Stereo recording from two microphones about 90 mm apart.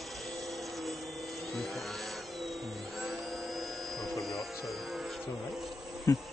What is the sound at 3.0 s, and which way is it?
Vacuum cleaner, centre (ahead or behind).